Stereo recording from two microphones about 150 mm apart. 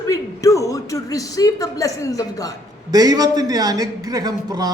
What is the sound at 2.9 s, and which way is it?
Speech, 25° right (ahead or behind).